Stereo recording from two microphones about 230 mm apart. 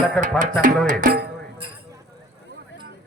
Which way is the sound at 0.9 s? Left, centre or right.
Right.